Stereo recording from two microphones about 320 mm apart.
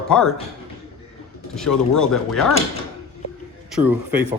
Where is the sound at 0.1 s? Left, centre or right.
Centre.